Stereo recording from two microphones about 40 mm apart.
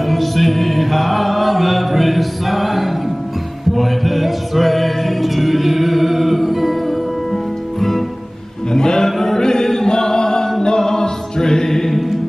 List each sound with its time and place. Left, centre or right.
0.0 s chant: centre
3.7 s music: centre
8.7 s chant: centre
10.6 s music: centre